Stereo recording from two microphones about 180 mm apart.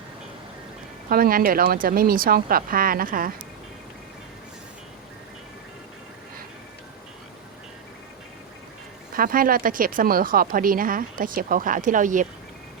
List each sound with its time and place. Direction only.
1.1 s a woman's voice: 55° right (ahead or behind)
9.1 s a woman's voice: 50° right (ahead or behind)